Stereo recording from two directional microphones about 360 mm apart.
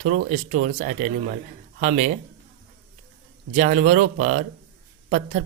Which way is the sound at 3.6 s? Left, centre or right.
Right.